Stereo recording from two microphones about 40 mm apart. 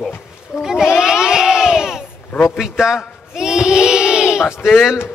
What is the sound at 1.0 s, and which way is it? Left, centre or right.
Crowd, centre.